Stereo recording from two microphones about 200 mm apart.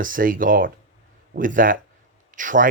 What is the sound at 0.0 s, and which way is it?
Speech, 45° right (ahead or behind).